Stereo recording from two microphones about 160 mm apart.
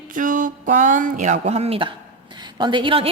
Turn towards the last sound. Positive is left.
turn(degrees=-30)  # may be behind; listen again after turning